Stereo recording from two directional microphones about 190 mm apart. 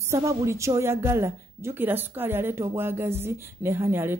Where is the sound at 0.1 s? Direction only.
15° right (ahead or behind).